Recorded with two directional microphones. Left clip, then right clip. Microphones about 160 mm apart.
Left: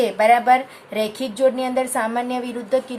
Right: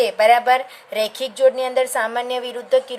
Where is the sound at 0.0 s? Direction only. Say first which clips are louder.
Right 1 dB; 40° right (ahead or behind).